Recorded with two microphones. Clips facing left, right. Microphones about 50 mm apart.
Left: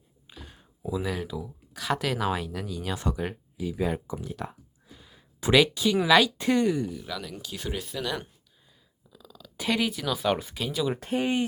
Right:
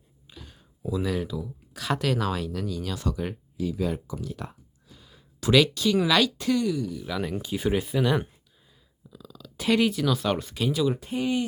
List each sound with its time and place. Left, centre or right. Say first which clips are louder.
0.3 s a sound: left 1 dB; centre
0.9 s speech: right 2 dB; centre
2.9 s speech: even; left
4.4 s a sound: left 2 dB; centre
5.4 s speech: even; centre
6.3 s speech: even; left
6.6 s speech: left 2 dB; left
7.2 s speech: right 8 dB; right
7.5 s speech: right 8 dB; centre
9.0 s speech: right 4 dB; centre
10.9 s speech: even; left